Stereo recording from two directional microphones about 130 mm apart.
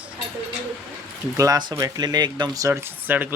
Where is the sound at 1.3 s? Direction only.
25° right (ahead or behind).